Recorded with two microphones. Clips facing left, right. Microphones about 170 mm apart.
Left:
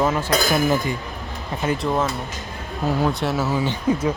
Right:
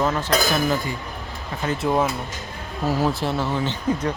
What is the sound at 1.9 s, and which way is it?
Speech, 10° right (ahead or behind).